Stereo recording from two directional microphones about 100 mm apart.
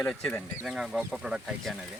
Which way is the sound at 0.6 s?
5° right (ahead or behind).